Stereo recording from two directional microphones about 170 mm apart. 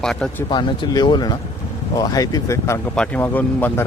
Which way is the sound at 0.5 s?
25° left (ahead or behind).